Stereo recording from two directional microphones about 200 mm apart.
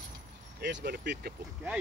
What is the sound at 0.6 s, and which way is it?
Speech, 60° right (ahead or behind).